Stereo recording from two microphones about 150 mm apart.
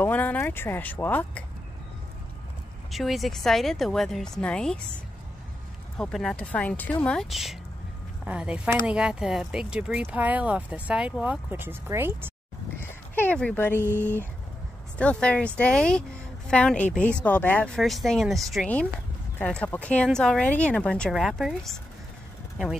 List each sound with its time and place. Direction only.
0.0 s speech: 10° left (ahead or behind)
2.9 s speech: centre (ahead or behind)
5.9 s speech: 5° left (ahead or behind); by 12.3 s 15° right (ahead or behind)
12.8 s speech: 15° left (ahead or behind)